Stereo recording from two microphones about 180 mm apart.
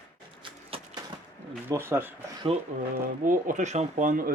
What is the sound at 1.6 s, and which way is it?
Speech, 15° right (ahead or behind).